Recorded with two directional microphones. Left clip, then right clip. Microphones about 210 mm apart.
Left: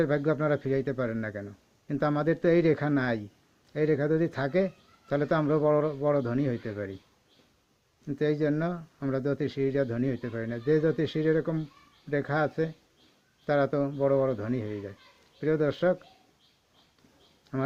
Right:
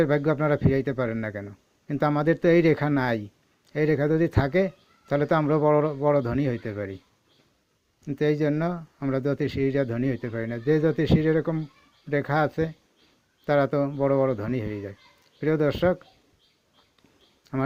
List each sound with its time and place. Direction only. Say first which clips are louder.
0.0 s speech: right 4 dB; 30° right (ahead or behind)
8.0 s speech: right 3 dB; 30° right (ahead or behind)
17.5 s speech: right 3 dB; 30° right (ahead or behind)